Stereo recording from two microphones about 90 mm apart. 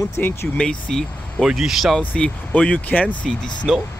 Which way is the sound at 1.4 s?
5° right (ahead or behind).